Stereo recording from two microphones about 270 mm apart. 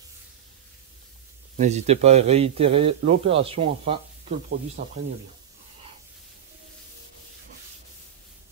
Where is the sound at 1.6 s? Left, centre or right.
Right.